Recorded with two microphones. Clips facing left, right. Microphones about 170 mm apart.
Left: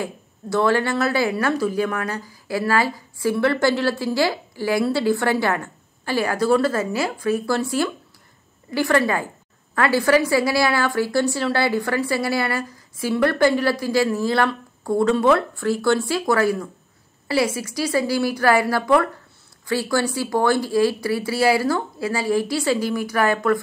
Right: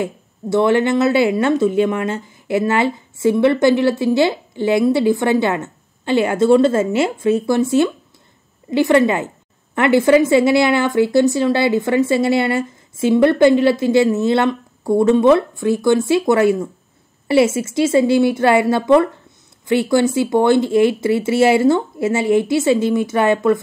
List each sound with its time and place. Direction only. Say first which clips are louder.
0.0 s speech: right 6 dB; 20° right (ahead or behind)